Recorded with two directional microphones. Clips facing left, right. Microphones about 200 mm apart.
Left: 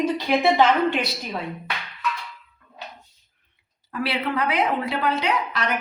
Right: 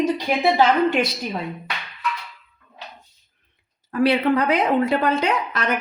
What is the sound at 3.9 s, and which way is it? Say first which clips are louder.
A woman's voice: right 8 dB; 45° right (ahead or behind).